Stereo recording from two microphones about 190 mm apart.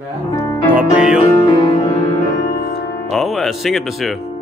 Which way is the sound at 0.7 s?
5° right (ahead or behind).